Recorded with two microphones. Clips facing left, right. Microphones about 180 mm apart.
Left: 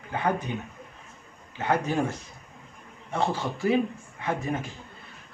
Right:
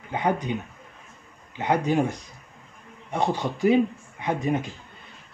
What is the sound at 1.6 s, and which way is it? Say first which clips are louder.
Speech: right 3 dB; 15° right (ahead or behind).